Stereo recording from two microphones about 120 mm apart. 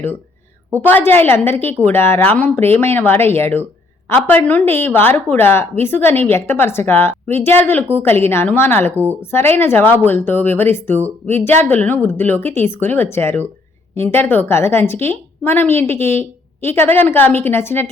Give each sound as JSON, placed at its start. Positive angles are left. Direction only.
{"t": 0.7, "sound": "a woman's voice", "side_deg": 15}